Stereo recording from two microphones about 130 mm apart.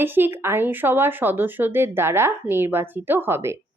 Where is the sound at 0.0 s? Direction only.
15° right (ahead or behind).